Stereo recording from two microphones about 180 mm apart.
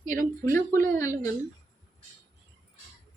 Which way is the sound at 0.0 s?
45° right (ahead or behind).